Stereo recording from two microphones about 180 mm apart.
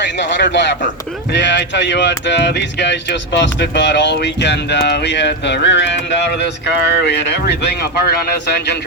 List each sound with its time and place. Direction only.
0.0 s speech: 75° left (ahead or behind)